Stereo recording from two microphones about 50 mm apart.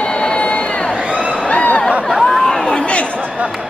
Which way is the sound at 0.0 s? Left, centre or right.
Centre.